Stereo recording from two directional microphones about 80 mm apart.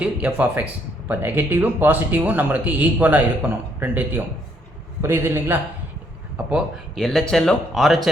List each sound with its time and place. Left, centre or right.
0.0 s a man's voice: centre
6.4 s speech: centre
6.9 s speech: centre